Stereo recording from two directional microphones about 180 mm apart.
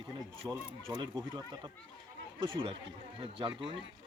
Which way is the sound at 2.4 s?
30° right (ahead or behind).